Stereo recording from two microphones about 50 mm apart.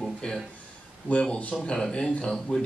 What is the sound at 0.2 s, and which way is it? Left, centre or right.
Speech, left.